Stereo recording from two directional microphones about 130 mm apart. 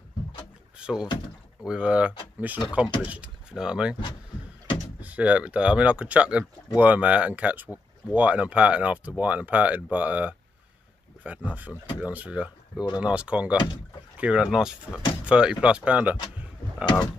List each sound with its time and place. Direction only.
0.7 s speech: 5° right (ahead or behind)
5.0 s speech: 10° right (ahead or behind)
16.8 s a sound: 35° left (ahead or behind)